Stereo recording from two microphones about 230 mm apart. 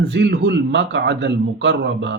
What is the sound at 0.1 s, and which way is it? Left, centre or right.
A man's voice, right.